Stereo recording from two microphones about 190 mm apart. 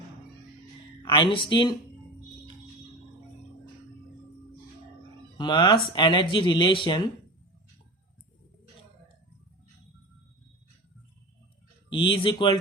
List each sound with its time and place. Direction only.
1.0 s speech: 25° left (ahead or behind)
5.4 s speech: 25° left (ahead or behind)
11.9 s speech: 25° left (ahead or behind)